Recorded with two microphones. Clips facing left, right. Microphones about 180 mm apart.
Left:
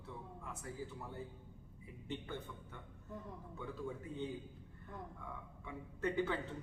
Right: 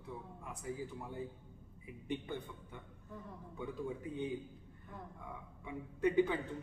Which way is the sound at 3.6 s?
15° right (ahead or behind).